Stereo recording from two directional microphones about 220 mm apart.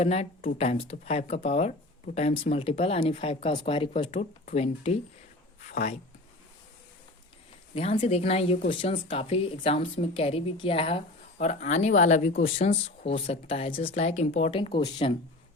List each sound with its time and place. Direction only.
0.0 s speech: 30° left (ahead or behind)
7.8 s speech: 25° left (ahead or behind)